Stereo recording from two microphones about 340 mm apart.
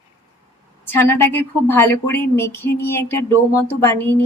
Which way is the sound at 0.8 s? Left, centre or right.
Centre.